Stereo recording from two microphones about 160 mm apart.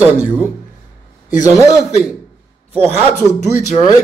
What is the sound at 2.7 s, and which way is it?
A man's voice, 40° right (ahead or behind).